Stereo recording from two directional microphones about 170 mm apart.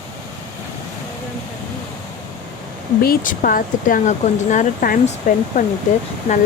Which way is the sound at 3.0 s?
60° left (ahead or behind).